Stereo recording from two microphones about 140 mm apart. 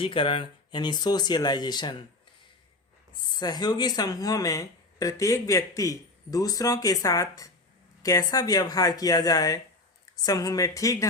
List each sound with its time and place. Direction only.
0.0 s speech: 40° left (ahead or behind)
3.2 s speech: 30° left (ahead or behind)